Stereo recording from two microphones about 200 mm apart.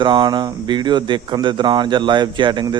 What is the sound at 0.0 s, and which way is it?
Speech, 25° right (ahead or behind).